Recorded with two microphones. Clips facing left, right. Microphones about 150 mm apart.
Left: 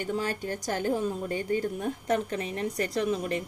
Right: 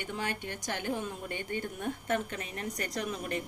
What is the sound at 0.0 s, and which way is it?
A woman's voice, 40° left (ahead or behind).